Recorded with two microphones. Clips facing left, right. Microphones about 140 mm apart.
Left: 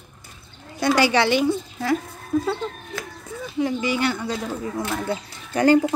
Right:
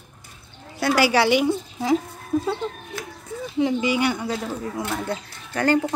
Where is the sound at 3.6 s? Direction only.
15° right (ahead or behind).